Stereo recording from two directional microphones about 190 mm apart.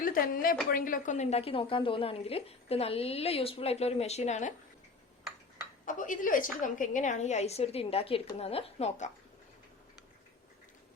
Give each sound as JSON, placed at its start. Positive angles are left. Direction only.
{"t": 0.0, "sound": "a woman's voice", "side_deg": 50}
{"t": 5.8, "sound": "a woman's voice", "side_deg": 45}